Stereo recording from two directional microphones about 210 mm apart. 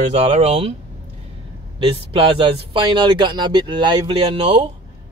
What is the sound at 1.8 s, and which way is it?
Speech, 25° right (ahead or behind).